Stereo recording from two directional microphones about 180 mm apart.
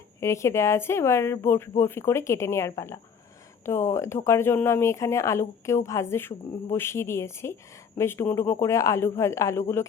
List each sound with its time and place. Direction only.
0.2 s speech: 15° left (ahead or behind)